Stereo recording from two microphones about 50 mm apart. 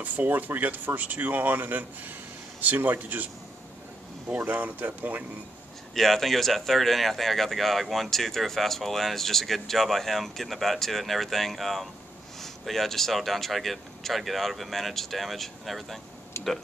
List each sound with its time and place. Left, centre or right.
0.0 s speech: right
4.4 s speech: right
5.9 s speech: centre
16.3 s a sound: left